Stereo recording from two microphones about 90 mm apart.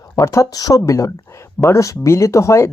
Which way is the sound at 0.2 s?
35° left (ahead or behind).